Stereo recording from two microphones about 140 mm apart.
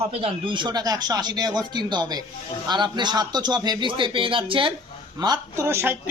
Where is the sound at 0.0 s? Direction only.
45° right (ahead or behind).